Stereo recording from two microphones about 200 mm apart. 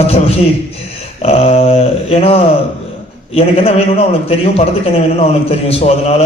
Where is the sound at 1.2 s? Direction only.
30° left (ahead or behind).